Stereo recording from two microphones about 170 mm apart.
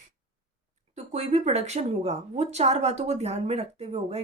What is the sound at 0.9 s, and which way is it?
Speech, 40° right (ahead or behind).